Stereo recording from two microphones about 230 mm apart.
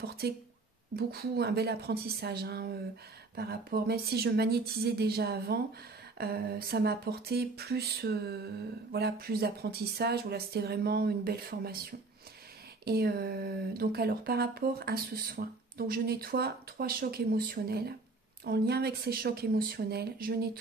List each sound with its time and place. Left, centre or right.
0.2 s speech: right